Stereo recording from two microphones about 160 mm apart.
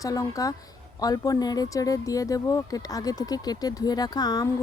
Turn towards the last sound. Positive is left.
turn(degrees=25)  # may be behind; listen again after turning